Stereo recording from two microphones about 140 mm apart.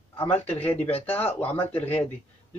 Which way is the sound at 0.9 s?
45° left (ahead or behind).